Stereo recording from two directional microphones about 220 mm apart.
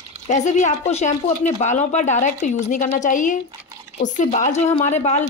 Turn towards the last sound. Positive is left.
turn(degrees=30)  # may be behind; listen again after turning